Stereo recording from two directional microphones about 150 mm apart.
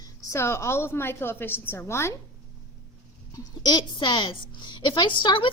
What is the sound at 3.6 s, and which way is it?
A woman's voice, 30° left (ahead or behind).